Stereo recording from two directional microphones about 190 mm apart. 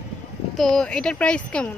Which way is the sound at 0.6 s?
Centre (ahead or behind).